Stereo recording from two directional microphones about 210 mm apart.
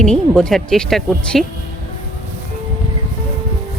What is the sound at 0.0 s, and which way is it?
Speech, 5° left (ahead or behind).